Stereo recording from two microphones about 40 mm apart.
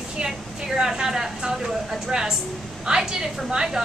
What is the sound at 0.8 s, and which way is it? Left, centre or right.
A woman's voice, centre.